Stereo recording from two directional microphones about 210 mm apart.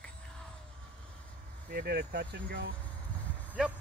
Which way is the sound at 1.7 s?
45° right (ahead or behind).